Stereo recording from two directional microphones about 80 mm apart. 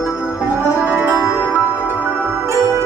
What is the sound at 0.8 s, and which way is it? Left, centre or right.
Music, centre.